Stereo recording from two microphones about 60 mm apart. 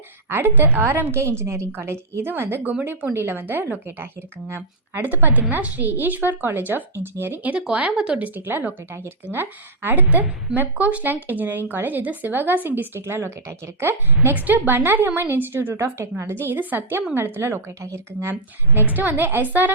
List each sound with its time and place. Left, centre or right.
0.3 s a woman's voice: right
5.0 s a woman's voice: right
7.5 s speech: centre
8.4 s a woman's voice: right
18.7 s a woman's voice: right